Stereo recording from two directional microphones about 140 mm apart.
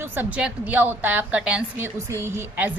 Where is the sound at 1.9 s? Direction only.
20° right (ahead or behind).